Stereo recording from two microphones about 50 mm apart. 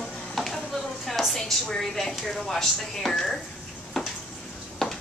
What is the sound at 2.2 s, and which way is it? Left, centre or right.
Speech, centre.